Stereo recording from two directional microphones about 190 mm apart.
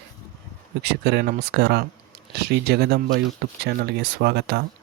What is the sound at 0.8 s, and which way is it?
Speech, 60° right (ahead or behind).